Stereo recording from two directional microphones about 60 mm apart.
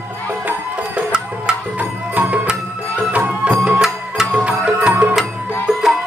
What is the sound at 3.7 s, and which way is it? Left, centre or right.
Music, centre.